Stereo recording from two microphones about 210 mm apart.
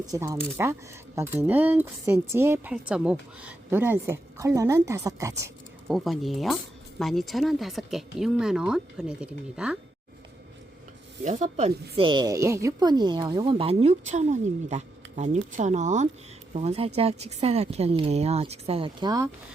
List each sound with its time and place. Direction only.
0.0 s speech: 15° right (ahead or behind)
5.9 s speech: centre (ahead or behind)
11.2 s speech: 35° right (ahead or behind)
11.9 s a woman's voice: 20° right (ahead or behind)